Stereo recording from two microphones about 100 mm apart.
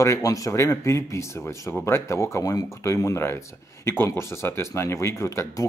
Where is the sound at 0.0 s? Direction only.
35° left (ahead or behind).